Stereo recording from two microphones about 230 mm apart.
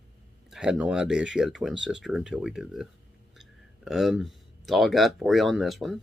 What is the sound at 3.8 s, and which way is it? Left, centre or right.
Speech, centre.